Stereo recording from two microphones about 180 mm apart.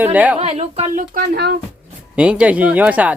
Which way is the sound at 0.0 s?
10° right (ahead or behind).